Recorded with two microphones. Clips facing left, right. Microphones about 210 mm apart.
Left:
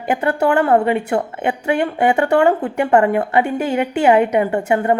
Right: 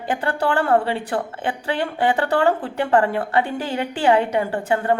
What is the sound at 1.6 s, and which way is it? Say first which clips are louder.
A woman's voice: left 5 dB; 15° left (ahead or behind).